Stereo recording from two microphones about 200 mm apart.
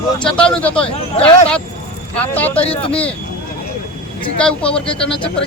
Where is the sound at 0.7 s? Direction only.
25° left (ahead or behind).